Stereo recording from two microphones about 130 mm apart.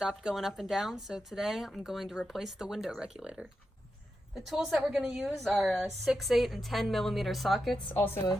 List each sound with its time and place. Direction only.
0.0 s speech: 5° right (ahead or behind)
7.9 s a woman's voice: 15° left (ahead or behind)